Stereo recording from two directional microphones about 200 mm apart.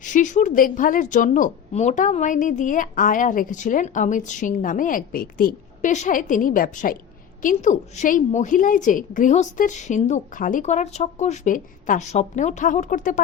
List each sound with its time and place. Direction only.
0.0 s a woman's voice: 40° left (ahead or behind)